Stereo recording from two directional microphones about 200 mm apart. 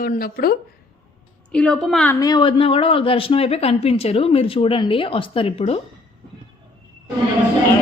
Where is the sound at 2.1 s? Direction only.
20° left (ahead or behind).